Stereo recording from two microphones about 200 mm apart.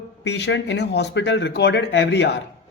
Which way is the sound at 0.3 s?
60° left (ahead or behind).